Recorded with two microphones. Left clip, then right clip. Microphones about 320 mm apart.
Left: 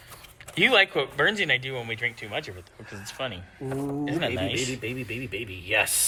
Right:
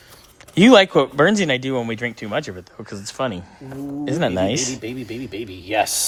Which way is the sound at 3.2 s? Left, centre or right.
Right.